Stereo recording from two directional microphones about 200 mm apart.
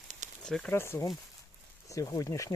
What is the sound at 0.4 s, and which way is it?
Speech, 5° left (ahead or behind).